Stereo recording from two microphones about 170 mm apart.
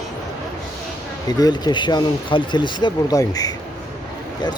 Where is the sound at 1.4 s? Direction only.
25° left (ahead or behind).